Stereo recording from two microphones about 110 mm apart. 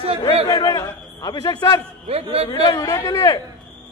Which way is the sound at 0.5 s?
35° left (ahead or behind).